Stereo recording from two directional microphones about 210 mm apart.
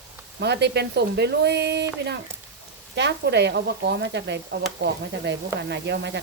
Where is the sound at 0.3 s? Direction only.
50° right (ahead or behind).